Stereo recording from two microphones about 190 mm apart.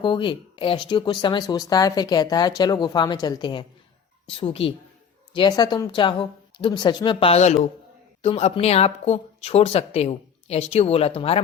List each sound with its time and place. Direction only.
0.0 s speech: 25° left (ahead or behind)